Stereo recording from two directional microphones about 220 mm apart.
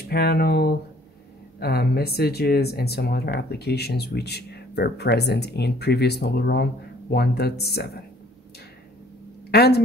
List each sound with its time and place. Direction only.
0.1 s speech: 45° left (ahead or behind)
9.5 s speech: 45° left (ahead or behind)